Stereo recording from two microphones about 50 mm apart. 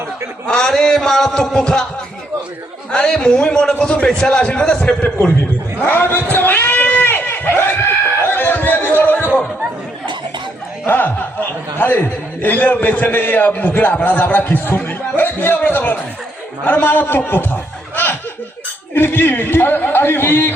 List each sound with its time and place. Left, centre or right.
0.4 s a man's voice: centre
2.9 s a man's voice: centre
5.8 s speech: left
6.3 s goat: left
8.3 s chatter: left
10.8 s a man's voice: left